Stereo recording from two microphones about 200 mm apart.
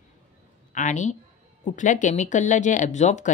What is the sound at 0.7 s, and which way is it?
A woman's voice, 35° left (ahead or behind).